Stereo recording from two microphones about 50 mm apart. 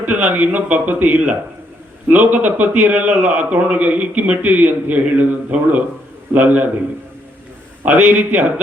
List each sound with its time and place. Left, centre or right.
0.0 s a man's voice: right
7.9 s a man's voice: right